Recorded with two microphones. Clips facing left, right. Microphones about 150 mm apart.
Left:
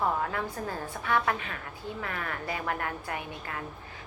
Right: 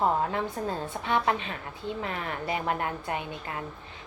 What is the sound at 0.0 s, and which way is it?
A woman's voice, 25° right (ahead or behind).